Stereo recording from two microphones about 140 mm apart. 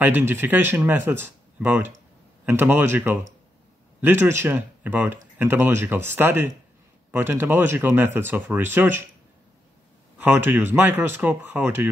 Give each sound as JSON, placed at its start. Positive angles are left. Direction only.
{"t": 0.0, "sound": "speech", "side_deg": -15}
{"t": 10.1, "sound": "speech", "side_deg": -15}